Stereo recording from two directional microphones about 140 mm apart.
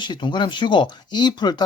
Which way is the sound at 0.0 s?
35° left (ahead or behind).